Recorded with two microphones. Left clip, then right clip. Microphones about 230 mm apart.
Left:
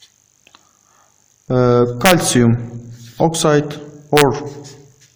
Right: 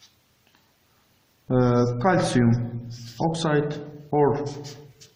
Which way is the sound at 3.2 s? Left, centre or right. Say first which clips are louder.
Left 9 dB; left.